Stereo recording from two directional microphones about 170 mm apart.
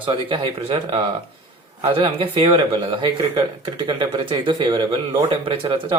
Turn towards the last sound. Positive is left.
turn(degrees=-30)  # may be behind; listen again after turning